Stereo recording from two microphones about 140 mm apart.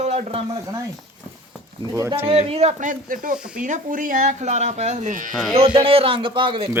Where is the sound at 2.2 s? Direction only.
45° right (ahead or behind); by 3.4 s 80° right.